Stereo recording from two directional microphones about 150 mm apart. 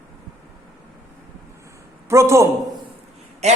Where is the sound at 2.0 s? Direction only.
20° right (ahead or behind).